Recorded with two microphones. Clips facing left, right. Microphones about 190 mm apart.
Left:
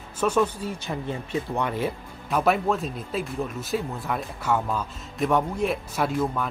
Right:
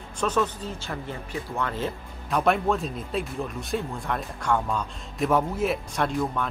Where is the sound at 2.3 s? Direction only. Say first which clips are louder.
Even; centre (ahead or behind).